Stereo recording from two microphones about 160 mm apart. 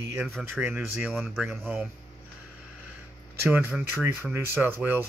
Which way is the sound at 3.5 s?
10° right (ahead or behind).